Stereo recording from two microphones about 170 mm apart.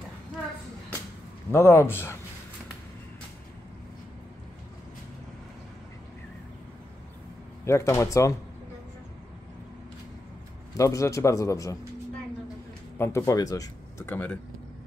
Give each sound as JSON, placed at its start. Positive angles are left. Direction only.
{"t": 1.5, "sound": "speech", "side_deg": 15}
{"t": 7.6, "sound": "speech", "side_deg": 15}
{"t": 10.8, "sound": "a man's voice", "side_deg": 20}
{"t": 12.9, "sound": "speech", "side_deg": 15}
{"t": 14.0, "sound": "speech", "side_deg": 10}